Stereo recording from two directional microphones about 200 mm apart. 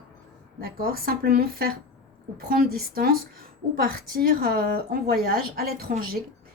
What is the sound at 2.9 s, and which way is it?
A woman's voice, 45° right (ahead or behind).